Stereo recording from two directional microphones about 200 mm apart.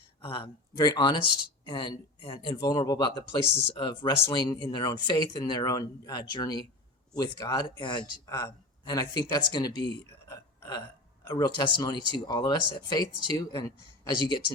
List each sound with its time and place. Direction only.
0.2 s a man's voice: 25° left (ahead or behind)